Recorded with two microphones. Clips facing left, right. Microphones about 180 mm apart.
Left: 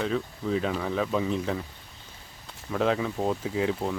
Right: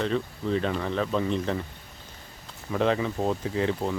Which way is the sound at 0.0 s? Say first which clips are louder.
Right 1 dB; 5° left (ahead or behind).